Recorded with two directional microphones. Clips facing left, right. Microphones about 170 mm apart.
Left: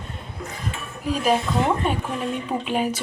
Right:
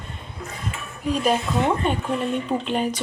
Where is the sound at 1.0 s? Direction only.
5° left (ahead or behind).